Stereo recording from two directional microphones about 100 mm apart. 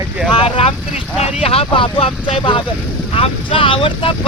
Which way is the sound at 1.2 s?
90° left.